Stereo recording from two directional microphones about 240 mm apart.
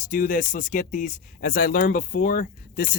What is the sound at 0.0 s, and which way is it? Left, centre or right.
Speech, left.